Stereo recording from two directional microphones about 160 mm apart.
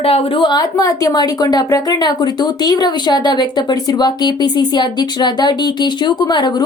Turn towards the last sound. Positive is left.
turn(degrees=25)  # may be behind; listen again after turning